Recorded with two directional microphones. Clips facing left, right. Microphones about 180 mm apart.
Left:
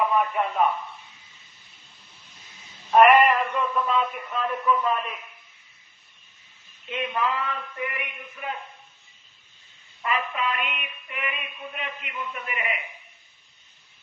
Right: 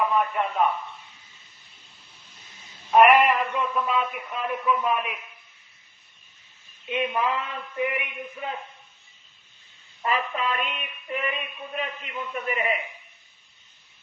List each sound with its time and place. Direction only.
0.2 s a man's voice: centre (ahead or behind)
2.9 s a sound: centre (ahead or behind)
4.6 s a man's voice: 10° right (ahead or behind)
6.8 s a man's voice: 20° right (ahead or behind)
10.0 s mantra: 35° right (ahead or behind)